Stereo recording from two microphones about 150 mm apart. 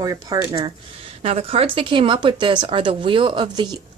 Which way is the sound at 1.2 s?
40° right (ahead or behind).